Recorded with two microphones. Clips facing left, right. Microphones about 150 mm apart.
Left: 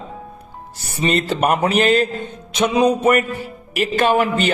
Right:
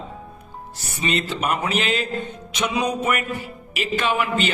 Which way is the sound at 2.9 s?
40° left (ahead or behind).